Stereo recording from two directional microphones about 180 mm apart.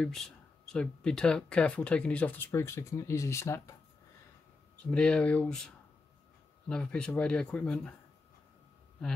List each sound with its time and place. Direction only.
0.0 s speech: centre (ahead or behind)
4.9 s speech: 5° left (ahead or behind)
6.7 s speech: 5° left (ahead or behind)